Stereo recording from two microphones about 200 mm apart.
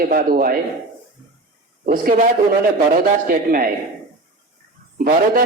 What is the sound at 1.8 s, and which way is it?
A man's voice, 45° right (ahead or behind).